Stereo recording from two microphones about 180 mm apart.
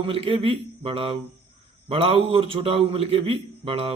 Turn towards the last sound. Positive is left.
turn(degrees=-35)  # may be behind; listen again after turning